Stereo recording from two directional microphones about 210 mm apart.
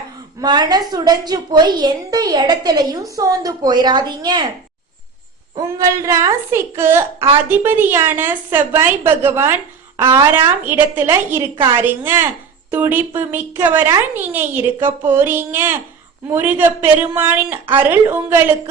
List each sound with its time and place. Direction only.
0.4 s a woman's voice: 20° right (ahead or behind)
5.5 s a woman's voice: 15° right (ahead or behind)